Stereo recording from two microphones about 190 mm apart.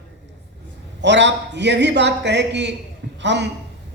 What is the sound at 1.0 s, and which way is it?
A woman's voice, 65° right (ahead or behind).